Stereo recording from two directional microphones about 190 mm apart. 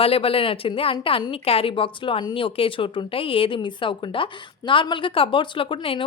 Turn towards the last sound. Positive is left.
turn(degrees=30)  # may be behind; listen again after turning